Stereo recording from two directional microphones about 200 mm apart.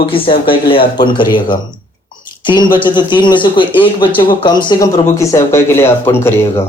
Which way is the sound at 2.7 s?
25° left (ahead or behind).